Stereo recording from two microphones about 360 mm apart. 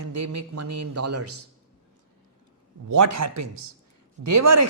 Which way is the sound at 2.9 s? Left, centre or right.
Right.